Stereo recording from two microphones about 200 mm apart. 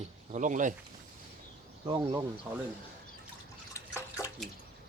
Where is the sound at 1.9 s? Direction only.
25° right (ahead or behind).